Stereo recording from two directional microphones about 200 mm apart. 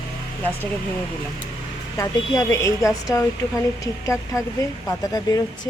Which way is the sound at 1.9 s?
15° left (ahead or behind).